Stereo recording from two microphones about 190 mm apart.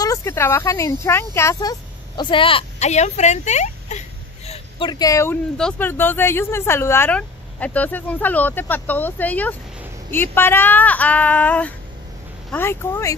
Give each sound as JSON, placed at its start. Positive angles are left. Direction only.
{"t": 0.0, "sound": "speech", "side_deg": 15}
{"t": 4.5, "sound": "speech", "side_deg": 25}